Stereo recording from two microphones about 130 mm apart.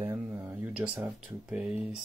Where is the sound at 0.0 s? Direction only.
20° right (ahead or behind).